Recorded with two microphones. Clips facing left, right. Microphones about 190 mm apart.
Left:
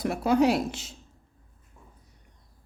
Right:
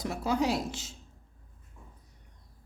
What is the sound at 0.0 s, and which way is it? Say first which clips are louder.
Speech: left 7 dB; 60° left (ahead or behind).